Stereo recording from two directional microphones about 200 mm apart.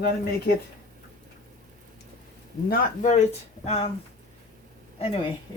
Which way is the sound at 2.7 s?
35° left (ahead or behind).